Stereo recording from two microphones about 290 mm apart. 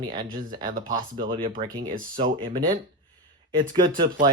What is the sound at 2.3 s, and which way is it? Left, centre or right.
Speech, centre.